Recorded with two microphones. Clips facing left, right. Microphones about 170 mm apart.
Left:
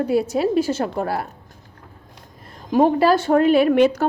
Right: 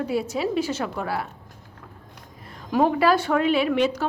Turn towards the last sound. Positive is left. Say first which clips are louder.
# left 6 dB
turn(degrees=55)  # may be behind; listen again after turning